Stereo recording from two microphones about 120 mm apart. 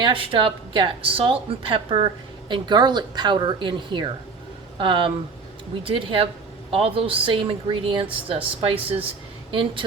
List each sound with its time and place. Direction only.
0.0 s a woman's voice: 45° right (ahead or behind)